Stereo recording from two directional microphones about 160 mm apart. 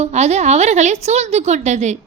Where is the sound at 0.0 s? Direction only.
45° right (ahead or behind).